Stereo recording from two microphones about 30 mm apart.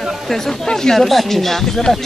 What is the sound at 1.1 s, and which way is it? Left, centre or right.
Speech, centre.